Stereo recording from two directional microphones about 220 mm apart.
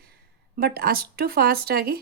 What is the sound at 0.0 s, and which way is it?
Speech, 45° right (ahead or behind).